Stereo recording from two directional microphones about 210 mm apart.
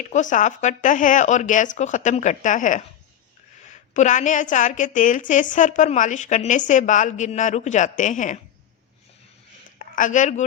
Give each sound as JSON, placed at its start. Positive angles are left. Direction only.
{"t": 0.0, "sound": "a woman's voice", "side_deg": 35}
{"t": 9.7, "sound": "speech", "side_deg": 40}